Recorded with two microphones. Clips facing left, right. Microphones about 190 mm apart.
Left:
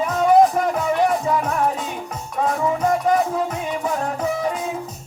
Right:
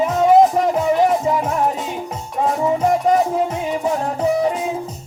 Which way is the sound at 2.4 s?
25° right (ahead or behind).